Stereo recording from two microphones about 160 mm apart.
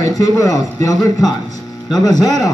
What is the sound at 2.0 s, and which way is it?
Speech, 25° left (ahead or behind).